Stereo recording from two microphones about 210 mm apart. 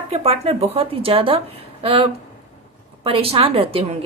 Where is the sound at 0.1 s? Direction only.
30° right (ahead or behind).